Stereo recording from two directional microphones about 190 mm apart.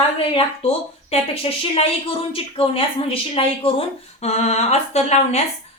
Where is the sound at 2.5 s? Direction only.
30° left (ahead or behind).